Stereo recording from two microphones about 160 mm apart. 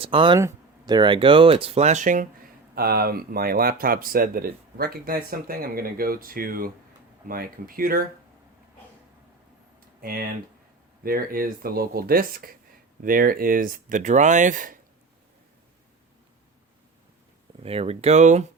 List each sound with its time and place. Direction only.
0.0 s speech: 35° right (ahead or behind)
0.3 s speech: 20° right (ahead or behind); by 2.2 s 50° right (ahead or behind)
2.7 s speech: 70° right (ahead or behind)
10.0 s speech: 65° right (ahead or behind)
17.6 s speech: 40° right (ahead or behind)